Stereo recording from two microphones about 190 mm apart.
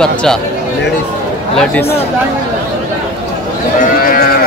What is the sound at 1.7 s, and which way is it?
Speech, 10° left (ahead or behind).